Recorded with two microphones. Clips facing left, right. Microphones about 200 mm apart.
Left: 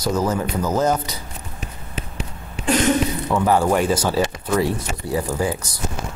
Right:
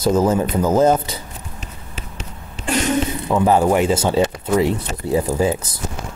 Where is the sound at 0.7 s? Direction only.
25° right (ahead or behind).